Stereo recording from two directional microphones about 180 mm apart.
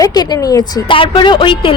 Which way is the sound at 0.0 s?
20° left (ahead or behind).